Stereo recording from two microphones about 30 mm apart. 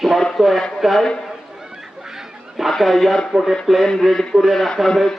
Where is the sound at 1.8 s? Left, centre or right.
Centre.